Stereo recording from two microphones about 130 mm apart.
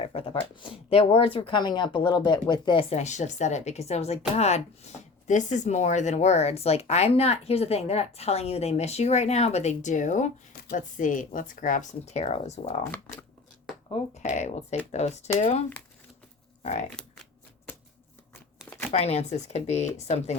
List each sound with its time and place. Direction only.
0.0 s a sound: 45° left (ahead or behind)
0.6 s speech: 45° left (ahead or behind)
2.9 s speech: 65° left (ahead or behind)
13.9 s speech: 60° left (ahead or behind)
18.9 s speech: 50° left (ahead or behind)